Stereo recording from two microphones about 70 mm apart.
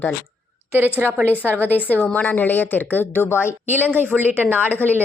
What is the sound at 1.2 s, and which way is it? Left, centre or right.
Speech, left.